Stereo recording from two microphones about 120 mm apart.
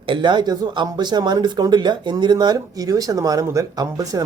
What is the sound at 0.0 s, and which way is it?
Speech, 45° right (ahead or behind).